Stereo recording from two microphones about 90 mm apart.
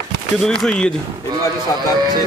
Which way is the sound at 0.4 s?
10° left (ahead or behind).